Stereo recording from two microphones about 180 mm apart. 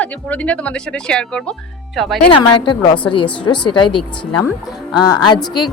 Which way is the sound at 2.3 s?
25° left (ahead or behind).